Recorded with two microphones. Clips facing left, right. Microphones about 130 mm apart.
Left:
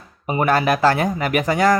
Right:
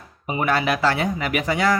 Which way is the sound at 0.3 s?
45° left (ahead or behind).